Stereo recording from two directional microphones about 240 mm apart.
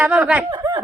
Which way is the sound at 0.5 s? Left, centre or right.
Centre.